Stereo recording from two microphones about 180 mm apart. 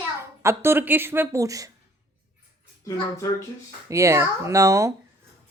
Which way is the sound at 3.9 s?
15° right (ahead or behind).